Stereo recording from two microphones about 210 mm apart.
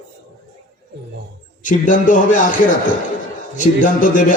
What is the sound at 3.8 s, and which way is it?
Speech, 40° left (ahead or behind).